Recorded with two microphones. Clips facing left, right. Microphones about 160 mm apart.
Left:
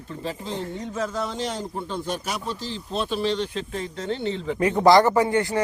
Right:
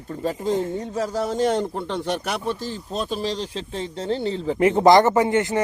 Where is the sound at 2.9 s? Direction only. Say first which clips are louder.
Left 2 dB; 40° right (ahead or behind).